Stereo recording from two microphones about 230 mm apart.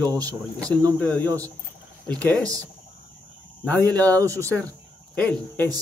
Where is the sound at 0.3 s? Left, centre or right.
Centre.